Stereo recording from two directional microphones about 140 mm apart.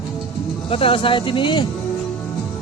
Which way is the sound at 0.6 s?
40° left (ahead or behind).